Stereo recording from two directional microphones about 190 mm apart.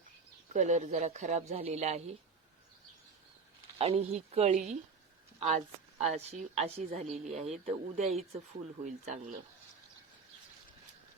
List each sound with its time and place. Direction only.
0.5 s a woman's voice: 40° right (ahead or behind)
3.8 s a woman's voice: 30° right (ahead or behind)